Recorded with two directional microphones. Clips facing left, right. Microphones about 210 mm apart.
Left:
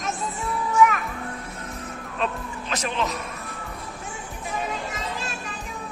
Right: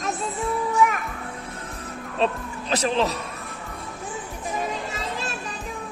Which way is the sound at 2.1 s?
35° right (ahead or behind).